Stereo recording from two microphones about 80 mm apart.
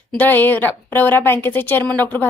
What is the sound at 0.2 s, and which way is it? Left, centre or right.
A woman's voice, left.